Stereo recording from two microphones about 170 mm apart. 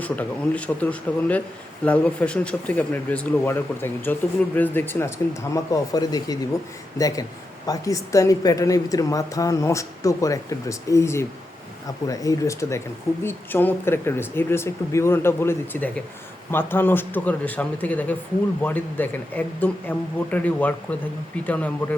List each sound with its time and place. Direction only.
0.0 s a woman's voice: 10° left (ahead or behind)